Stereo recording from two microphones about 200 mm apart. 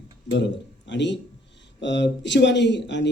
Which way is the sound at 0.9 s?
60° left (ahead or behind).